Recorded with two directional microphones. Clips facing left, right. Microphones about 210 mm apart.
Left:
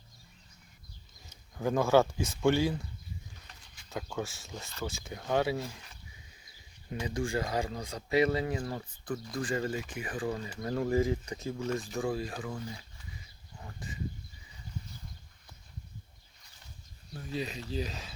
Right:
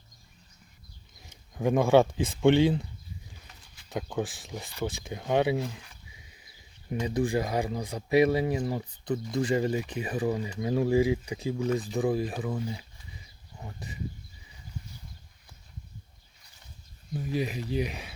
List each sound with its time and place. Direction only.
1.5 s speech: 15° right (ahead or behind)
3.8 s speech: 15° right (ahead or behind)
7.0 s speech: 20° right (ahead or behind)
13.7 s speech: 20° right (ahead or behind)
17.4 s speech: 15° right (ahead or behind)